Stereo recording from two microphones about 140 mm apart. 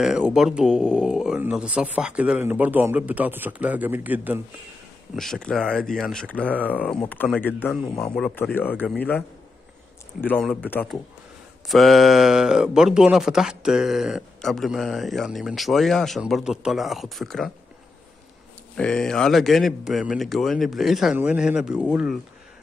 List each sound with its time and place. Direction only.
0.0 s a man's voice: 5° right (ahead or behind)
5.1 s a man's voice: 5° left (ahead or behind)
10.2 s a man's voice: 10° left (ahead or behind)
11.7 s speech: centre (ahead or behind)
18.8 s a man's voice: 5° left (ahead or behind)